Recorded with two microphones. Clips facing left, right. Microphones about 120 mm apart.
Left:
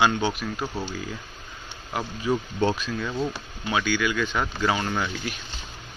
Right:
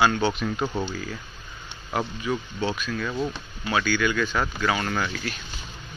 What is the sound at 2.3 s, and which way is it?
Speech, 35° left (ahead or behind).